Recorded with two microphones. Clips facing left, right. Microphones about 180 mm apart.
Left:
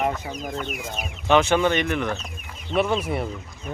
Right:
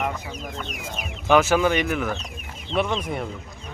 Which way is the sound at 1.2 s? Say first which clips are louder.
Even; 5° right (ahead or behind).